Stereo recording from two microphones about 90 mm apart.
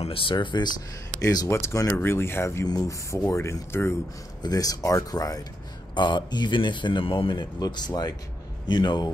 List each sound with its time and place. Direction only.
0.1 s speech: 75° left (ahead or behind)
0.7 s speech: 45° left (ahead or behind)
1.5 s speech: 30° left (ahead or behind)
2.6 s speech: 40° left (ahead or behind)
4.4 s speech: 45° left (ahead or behind)
5.9 s speech: 60° left (ahead or behind); by 7.3 s 75° left (ahead or behind)
7.3 s speech: 50° left (ahead or behind)